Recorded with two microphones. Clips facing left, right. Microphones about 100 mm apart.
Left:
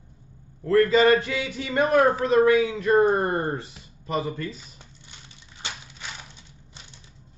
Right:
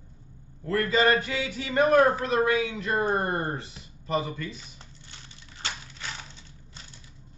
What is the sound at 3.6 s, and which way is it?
Speech, 30° right (ahead or behind).